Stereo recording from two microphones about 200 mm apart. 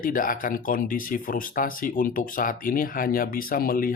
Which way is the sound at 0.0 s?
45° left (ahead or behind).